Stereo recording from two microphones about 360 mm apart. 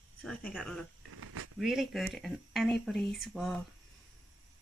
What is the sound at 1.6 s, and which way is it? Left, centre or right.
Speech, centre.